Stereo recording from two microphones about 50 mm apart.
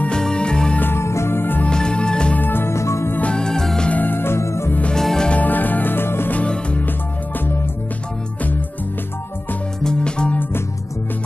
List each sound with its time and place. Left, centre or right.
0.1 s music: centre
0.7 s music: left
1.0 s music: left
1.7 s music: centre
2.3 s music: left
2.6 s music: left
3.2 s music: centre
3.9 s music: left
4.4 s music: left
4.9 s music: centre
5.3 s music: left
6.3 s music: left
9.8 s music: centre